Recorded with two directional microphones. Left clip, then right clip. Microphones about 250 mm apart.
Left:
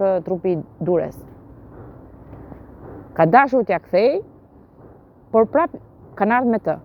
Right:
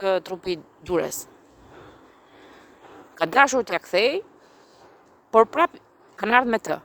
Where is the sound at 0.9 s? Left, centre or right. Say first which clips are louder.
Left 4 dB; right.